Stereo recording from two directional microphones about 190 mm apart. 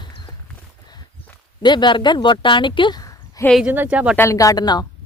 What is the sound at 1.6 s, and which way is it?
Speech, 25° left (ahead or behind).